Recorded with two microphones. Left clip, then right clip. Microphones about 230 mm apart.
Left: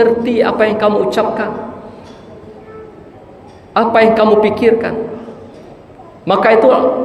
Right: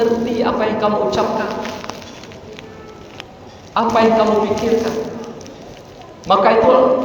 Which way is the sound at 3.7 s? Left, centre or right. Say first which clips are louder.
Left 4 dB; left.